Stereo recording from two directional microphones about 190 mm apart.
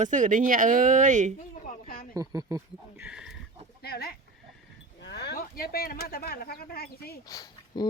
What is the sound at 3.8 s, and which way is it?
Speech, 55° left (ahead or behind).